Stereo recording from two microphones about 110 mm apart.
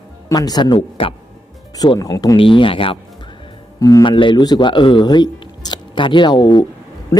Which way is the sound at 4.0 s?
45° left (ahead or behind).